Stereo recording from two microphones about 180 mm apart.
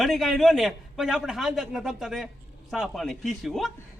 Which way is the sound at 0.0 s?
Centre (ahead or behind).